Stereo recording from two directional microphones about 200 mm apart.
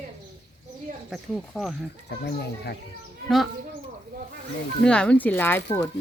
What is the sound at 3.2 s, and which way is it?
Speech, centre (ahead or behind).